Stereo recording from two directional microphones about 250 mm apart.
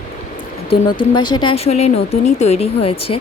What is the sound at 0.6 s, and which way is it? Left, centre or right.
Speech, centre.